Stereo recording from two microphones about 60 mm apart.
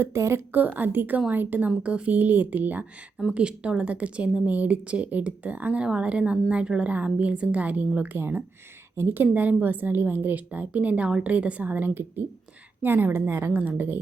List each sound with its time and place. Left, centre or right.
0.0 s a woman's voice: right
0.5 s a woman's voice: right
3.3 s a woman's voice: centre; by 13.5 s right
13.5 s a woman's voice: right